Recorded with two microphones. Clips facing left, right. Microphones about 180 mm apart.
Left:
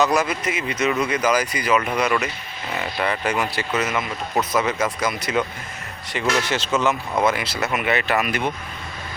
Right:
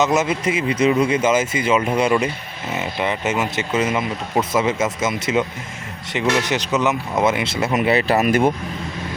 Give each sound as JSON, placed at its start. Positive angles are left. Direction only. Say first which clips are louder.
{"t": 0.0, "sound": "speech", "louder": "right 2 dB", "side_deg": -20}